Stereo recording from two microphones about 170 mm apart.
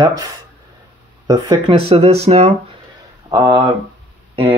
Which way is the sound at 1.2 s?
25° right (ahead or behind).